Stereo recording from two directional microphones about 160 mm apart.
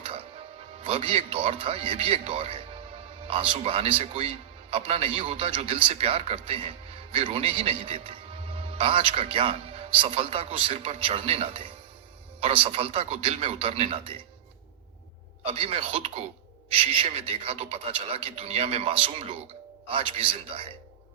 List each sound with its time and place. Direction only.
0.0 s music: 35° right (ahead or behind)
0.8 s a man's voice: 35° right (ahead or behind)
15.4 s a man's voice: 35° right (ahead or behind)